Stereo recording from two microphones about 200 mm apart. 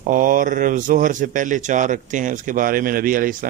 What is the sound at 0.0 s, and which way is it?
A man's voice, 40° right (ahead or behind).